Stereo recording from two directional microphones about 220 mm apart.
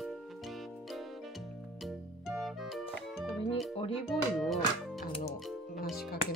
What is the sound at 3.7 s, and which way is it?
Music, 25° left (ahead or behind).